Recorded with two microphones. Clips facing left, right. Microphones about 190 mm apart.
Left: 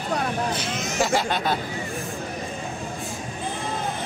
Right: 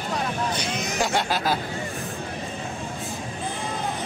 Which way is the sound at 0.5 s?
Centre (ahead or behind).